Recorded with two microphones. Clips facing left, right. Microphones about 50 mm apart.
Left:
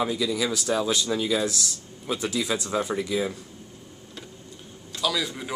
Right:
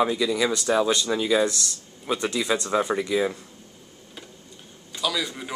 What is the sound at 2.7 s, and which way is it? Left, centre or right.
Speech, centre.